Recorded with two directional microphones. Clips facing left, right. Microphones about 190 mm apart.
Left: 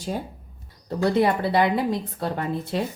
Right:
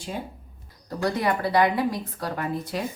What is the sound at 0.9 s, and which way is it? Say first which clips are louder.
A woman's voice: left 4 dB; 25° left (ahead or behind).